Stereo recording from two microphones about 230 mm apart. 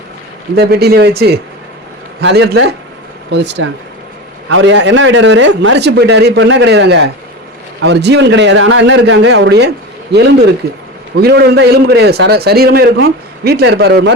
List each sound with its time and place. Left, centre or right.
0.5 s a man's voice: right
2.2 s a man's voice: right